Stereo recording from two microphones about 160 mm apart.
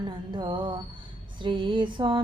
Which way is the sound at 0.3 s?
30° right (ahead or behind).